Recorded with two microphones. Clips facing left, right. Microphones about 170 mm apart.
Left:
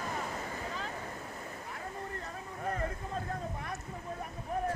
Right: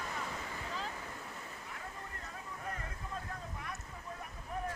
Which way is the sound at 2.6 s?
40° left (ahead or behind).